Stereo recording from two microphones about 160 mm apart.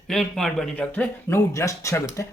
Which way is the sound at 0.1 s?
Centre (ahead or behind).